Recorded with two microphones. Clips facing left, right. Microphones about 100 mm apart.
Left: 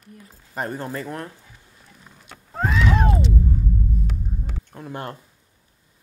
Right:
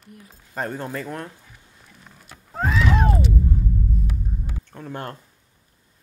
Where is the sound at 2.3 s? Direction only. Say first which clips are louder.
Even; centre (ahead or behind).